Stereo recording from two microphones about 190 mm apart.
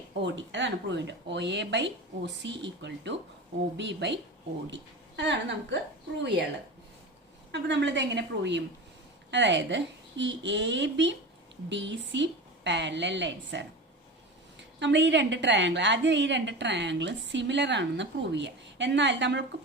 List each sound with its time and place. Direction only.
0.2 s a woman's voice: 65° right (ahead or behind)
7.5 s a woman's voice: 65° right (ahead or behind)
14.8 s a woman's voice: 70° right (ahead or behind)